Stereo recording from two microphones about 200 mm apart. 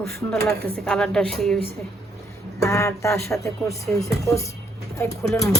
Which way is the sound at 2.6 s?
15° left (ahead or behind).